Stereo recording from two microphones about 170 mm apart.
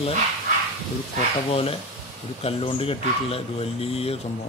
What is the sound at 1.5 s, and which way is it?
Speech, 35° left (ahead or behind).